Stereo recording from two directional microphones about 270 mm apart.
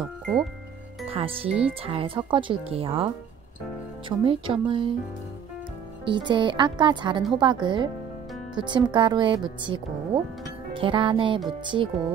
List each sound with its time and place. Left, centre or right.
0.0 s speech: centre
1.0 s speech: right
1.5 s speech: centre
1.8 s speech: centre
4.2 s speech: centre
6.0 s speech: centre